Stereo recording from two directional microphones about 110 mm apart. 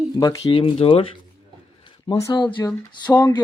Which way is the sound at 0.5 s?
55° left (ahead or behind).